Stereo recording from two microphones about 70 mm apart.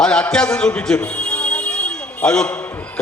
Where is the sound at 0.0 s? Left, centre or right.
Centre.